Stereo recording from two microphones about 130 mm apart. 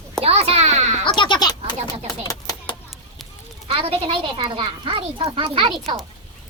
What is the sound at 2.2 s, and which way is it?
Typewriter, 30° left (ahead or behind).